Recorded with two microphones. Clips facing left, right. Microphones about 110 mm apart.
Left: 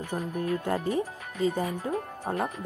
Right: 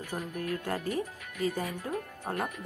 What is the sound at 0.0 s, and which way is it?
Music, 30° left (ahead or behind).